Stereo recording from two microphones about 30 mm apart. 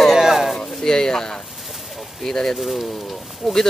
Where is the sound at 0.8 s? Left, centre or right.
Centre.